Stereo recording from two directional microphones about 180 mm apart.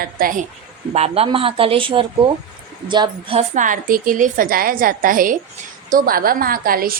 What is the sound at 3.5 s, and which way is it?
A woman's voice, 45° right (ahead or behind).